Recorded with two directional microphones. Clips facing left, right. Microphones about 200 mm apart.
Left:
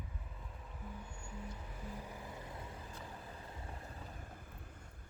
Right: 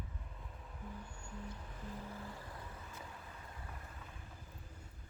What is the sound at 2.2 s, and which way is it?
Vehicle, 20° left (ahead or behind).